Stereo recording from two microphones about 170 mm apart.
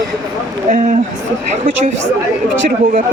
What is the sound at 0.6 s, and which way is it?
Speech, 45° right (ahead or behind).